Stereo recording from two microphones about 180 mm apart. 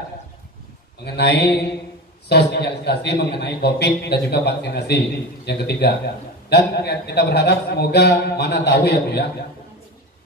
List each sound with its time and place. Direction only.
1.0 s a man's voice: 70° left (ahead or behind)